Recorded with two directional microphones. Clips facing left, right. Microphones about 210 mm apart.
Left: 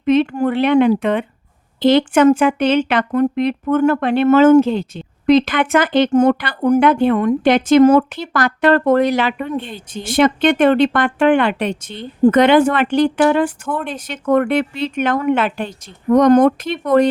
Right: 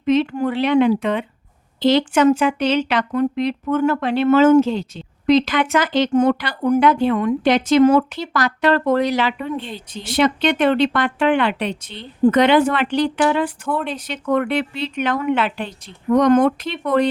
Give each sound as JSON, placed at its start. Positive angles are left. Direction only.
{"t": 0.0, "sound": "a woman's voice", "side_deg": 55}